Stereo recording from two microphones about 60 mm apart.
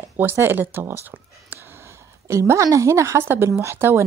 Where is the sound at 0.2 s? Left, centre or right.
Right.